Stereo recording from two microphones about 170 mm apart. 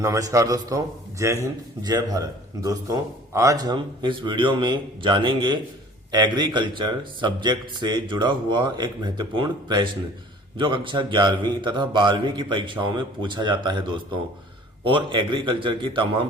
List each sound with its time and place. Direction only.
0.0 s a man's voice: 20° right (ahead or behind)